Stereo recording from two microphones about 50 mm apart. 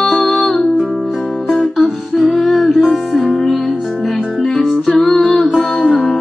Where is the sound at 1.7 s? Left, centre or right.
Centre.